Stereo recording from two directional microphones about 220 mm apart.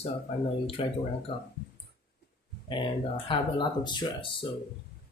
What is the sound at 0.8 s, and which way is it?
Speech, 25° left (ahead or behind).